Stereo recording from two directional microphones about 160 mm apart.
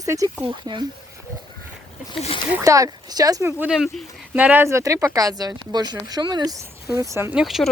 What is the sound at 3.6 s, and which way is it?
Speech, 5° right (ahead or behind).